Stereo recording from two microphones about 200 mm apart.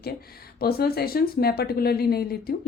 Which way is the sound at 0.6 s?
50° left (ahead or behind).